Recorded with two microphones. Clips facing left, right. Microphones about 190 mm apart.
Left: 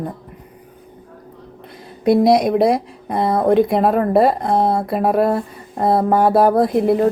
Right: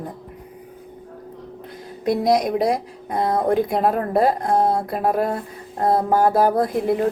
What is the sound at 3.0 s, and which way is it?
Speech, 70° left (ahead or behind).